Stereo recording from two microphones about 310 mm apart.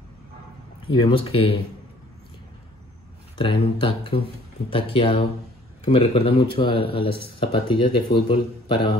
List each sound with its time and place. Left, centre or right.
0.9 s speech: centre
3.3 s speech: centre